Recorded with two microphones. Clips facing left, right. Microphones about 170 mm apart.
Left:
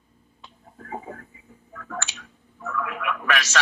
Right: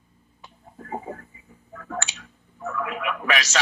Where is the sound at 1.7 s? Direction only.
20° right (ahead or behind).